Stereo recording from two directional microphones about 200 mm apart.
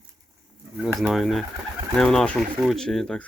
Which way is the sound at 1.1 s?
Centre (ahead or behind).